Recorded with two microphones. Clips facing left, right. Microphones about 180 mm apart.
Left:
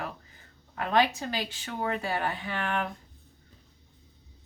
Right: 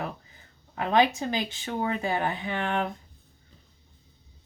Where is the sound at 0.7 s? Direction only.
20° right (ahead or behind).